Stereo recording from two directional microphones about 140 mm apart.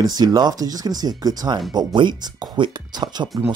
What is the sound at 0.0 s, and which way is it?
Speech, 30° right (ahead or behind).